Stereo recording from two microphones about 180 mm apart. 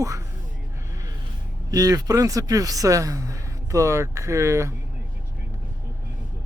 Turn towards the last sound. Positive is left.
turn(degrees=-15)  # may be behind; listen again after turning